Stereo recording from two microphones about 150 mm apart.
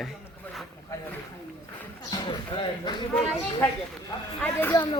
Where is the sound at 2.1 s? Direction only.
30° left (ahead or behind).